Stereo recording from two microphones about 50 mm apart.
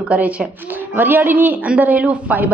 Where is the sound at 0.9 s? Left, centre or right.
Right.